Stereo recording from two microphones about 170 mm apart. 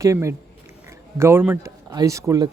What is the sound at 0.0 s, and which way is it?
Speech, 15° right (ahead or behind).